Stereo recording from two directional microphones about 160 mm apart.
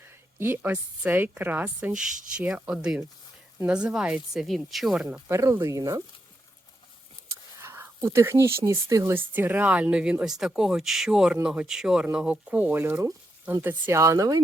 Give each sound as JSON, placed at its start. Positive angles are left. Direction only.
{"t": 0.3, "sound": "speech", "side_deg": -15}
{"t": 5.3, "sound": "speech", "side_deg": -20}
{"t": 7.3, "sound": "speech", "side_deg": -15}